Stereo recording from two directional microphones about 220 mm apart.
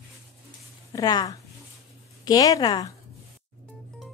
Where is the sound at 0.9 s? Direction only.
20° left (ahead or behind).